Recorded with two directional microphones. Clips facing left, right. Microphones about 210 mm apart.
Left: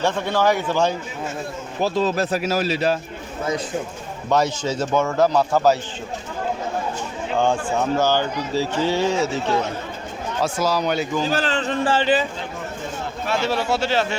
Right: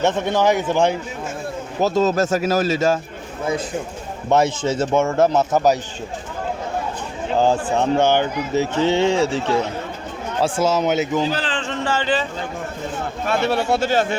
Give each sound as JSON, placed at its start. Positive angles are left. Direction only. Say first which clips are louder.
{"t": 0.0, "sound": "speech", "louder": "right 2 dB", "side_deg": -20}
{"t": 1.8, "sound": "speech", "louder": "right 3 dB", "side_deg": -45}
{"t": 4.3, "sound": "speech", "louder": "right 3 dB", "side_deg": -25}
{"t": 7.3, "sound": "speech", "louder": "right 3 dB", "side_deg": -35}
{"t": 10.4, "sound": "speech", "louder": "right 3 dB", "side_deg": -25}
{"t": 11.3, "sound": "music", "louder": "left 2 dB", "side_deg": 45}
{"t": 13.2, "sound": "speech", "louder": "right 3 dB", "side_deg": -55}